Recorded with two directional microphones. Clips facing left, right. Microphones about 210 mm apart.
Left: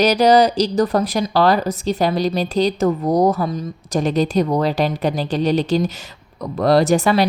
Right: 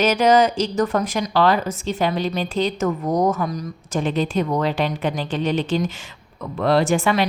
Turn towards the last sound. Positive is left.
turn(degrees=40)  # may be behind; listen again after turning